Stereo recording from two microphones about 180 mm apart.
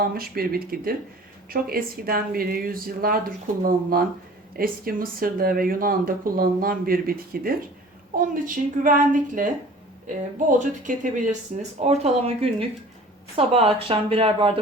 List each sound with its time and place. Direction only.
0.0 s a woman's voice: 55° right (ahead or behind)
10.6 s speech: 45° right (ahead or behind)
11.9 s speech: 35° right (ahead or behind)